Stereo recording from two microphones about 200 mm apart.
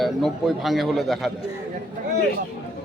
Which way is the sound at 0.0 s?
Centre (ahead or behind).